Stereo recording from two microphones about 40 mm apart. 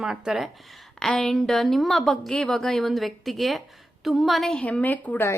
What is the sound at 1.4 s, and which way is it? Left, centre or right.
Speech, centre.